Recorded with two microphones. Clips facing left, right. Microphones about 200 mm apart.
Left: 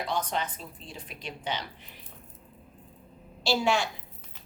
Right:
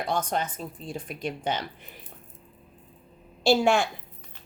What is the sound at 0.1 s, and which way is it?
Speech, 45° right (ahead or behind).